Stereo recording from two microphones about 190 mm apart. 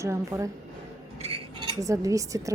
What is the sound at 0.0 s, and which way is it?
Speech, 15° right (ahead or behind).